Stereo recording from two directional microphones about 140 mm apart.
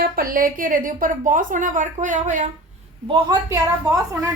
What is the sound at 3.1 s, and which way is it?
A woman's voice, 30° right (ahead or behind).